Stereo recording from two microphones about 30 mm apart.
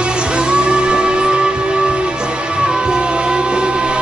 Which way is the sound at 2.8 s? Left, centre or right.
Right.